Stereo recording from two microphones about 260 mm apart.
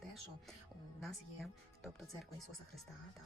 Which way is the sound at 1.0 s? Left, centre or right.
Centre.